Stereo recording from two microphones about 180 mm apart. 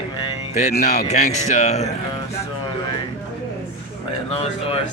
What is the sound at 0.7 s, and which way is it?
Speech, 60° left (ahead or behind).